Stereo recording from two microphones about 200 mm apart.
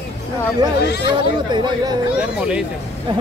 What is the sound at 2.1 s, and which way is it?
Speech, 5° right (ahead or behind).